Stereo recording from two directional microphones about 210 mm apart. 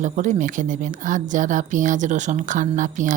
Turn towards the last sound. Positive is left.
turn(degrees=-35)  # may be behind; listen again after turning